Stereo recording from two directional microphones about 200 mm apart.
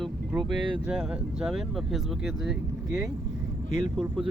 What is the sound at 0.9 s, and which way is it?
Speech, 5° right (ahead or behind).